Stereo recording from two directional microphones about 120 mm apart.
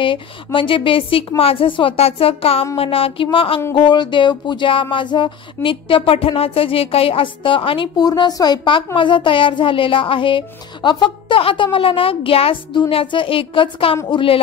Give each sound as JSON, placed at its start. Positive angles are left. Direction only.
{"t": 0.0, "sound": "music", "side_deg": 45}
{"t": 8.0, "sound": "a woman's voice", "side_deg": 30}
{"t": 8.9, "sound": "music", "side_deg": 45}